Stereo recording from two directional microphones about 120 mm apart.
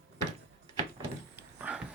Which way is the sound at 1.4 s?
15° right (ahead or behind).